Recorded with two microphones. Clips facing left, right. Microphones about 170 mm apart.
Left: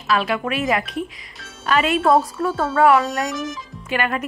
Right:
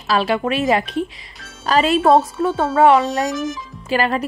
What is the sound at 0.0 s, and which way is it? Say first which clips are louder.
Speech: right 3 dB; 30° right (ahead or behind).